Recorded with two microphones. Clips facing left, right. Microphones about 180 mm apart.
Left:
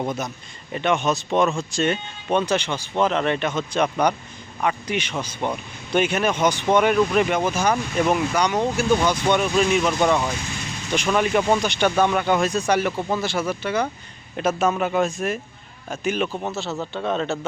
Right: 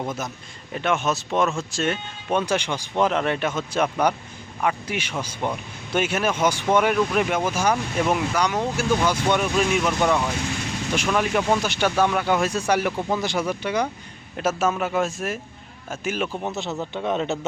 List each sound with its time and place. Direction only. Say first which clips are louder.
0.0 s a man's voice: left 3 dB; centre (ahead or behind)
14.3 s a man's voice: left 2 dB; 5° right (ahead or behind)
16.4 s speech: left 1 dB; 15° right (ahead or behind)